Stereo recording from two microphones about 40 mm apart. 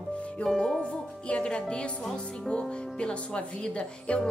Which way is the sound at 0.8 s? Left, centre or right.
Left.